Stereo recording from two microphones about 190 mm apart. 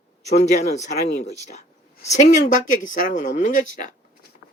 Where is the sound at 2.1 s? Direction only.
40° left (ahead or behind).